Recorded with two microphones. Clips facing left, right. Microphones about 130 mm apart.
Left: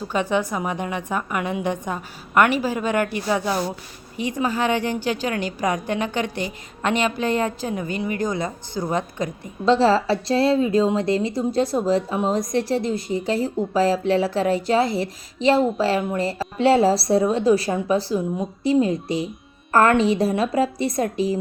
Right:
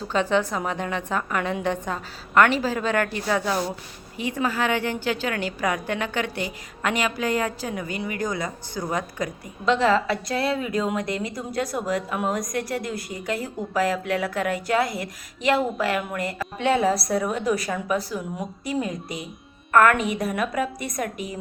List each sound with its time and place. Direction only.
0.1 s a woman's voice: 15° left (ahead or behind); by 21.3 s 30° left (ahead or behind)